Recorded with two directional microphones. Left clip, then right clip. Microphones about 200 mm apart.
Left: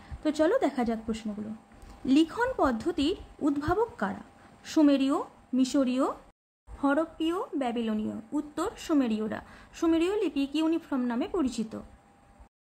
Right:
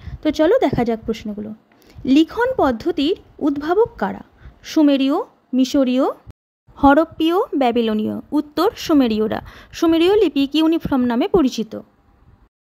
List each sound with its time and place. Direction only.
0.2 s a woman's voice: 35° right (ahead or behind)
6.8 s a woman's voice: 50° right (ahead or behind)